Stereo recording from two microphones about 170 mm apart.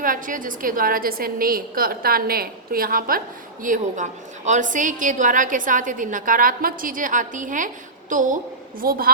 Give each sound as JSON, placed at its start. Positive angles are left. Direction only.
{"t": 0.0, "sound": "a woman's voice", "side_deg": -55}